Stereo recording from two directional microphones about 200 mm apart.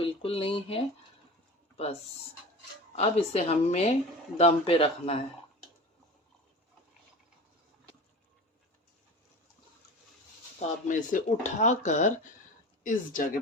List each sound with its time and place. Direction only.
0.0 s speech: 30° left (ahead or behind)
2.9 s speech: 30° left (ahead or behind)
10.6 s speech: 40° left (ahead or behind)